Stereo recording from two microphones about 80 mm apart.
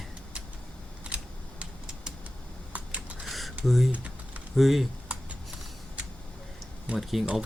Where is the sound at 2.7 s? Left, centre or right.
Centre.